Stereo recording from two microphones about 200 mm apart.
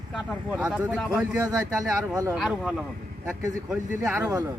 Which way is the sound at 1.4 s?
15° right (ahead or behind).